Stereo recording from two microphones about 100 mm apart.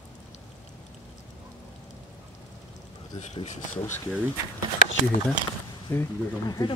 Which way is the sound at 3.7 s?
25° left (ahead or behind).